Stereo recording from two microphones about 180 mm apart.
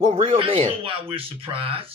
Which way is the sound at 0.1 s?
30° right (ahead or behind).